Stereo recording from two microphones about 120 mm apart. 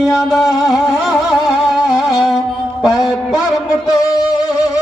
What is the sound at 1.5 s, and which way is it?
Music, centre (ahead or behind).